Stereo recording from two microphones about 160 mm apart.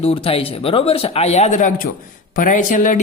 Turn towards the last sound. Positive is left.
turn(degrees=55)  # may be behind; listen again after turning